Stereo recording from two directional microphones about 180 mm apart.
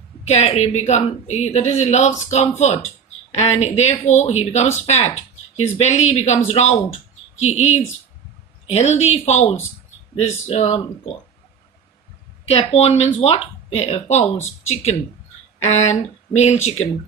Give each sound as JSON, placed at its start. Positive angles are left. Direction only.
{"t": 0.3, "sound": "speech", "side_deg": 40}
{"t": 8.7, "sound": "speech", "side_deg": 35}
{"t": 12.5, "sound": "speech", "side_deg": 35}
{"t": 15.6, "sound": "speech", "side_deg": 40}